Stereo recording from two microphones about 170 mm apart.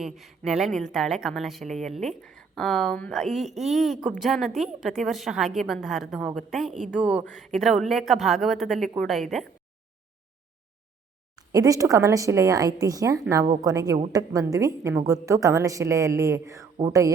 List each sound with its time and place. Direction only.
0.0 s a woman's voice: centre (ahead or behind)
11.3 s a woman's voice: 20° right (ahead or behind)